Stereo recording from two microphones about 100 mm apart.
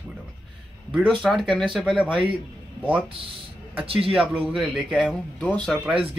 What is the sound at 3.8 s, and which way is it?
Speech, 70° right (ahead or behind).